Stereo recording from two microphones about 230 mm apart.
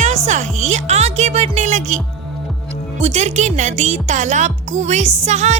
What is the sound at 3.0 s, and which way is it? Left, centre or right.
Speech, right.